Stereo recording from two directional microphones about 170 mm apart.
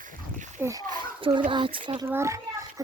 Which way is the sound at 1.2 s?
30° right (ahead or behind).